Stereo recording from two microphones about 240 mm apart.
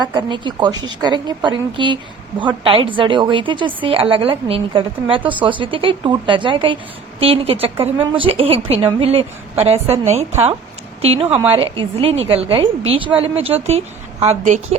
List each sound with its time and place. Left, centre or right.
0.0 s a woman's voice: centre
11.0 s a woman's voice: right